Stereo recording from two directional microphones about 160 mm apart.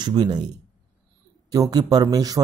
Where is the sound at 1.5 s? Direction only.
20° right (ahead or behind).